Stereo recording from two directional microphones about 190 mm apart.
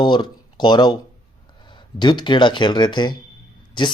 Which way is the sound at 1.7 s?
25° left (ahead or behind).